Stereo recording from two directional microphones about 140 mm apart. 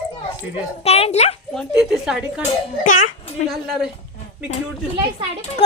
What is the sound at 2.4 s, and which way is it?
Speech, 65° left (ahead or behind).